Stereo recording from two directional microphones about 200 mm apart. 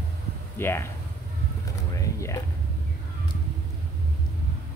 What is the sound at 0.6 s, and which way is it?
Speech, 10° left (ahead or behind).